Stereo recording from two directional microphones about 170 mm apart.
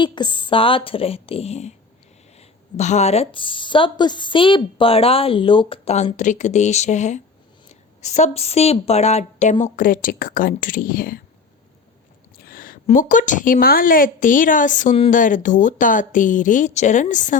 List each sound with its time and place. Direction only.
0.0 s a woman's voice: 25° left (ahead or behind); by 11.2 s 55° left (ahead or behind)
12.5 s a woman's voice: 55° left (ahead or behind)